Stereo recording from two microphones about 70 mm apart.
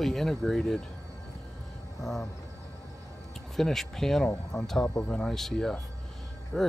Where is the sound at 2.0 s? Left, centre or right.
Centre.